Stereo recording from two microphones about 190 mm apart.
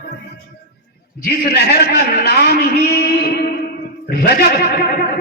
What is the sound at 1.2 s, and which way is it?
A man's voice, 55° left (ahead or behind).